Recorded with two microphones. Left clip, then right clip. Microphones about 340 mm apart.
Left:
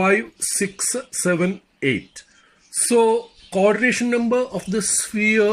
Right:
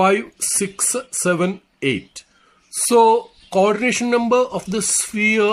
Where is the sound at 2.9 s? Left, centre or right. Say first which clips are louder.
Right 4 dB; right.